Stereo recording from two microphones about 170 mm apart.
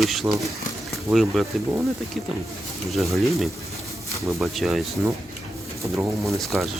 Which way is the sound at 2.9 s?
Centre (ahead or behind).